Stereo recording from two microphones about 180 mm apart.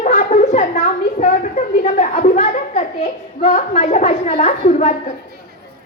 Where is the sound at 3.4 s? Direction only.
35° left (ahead or behind).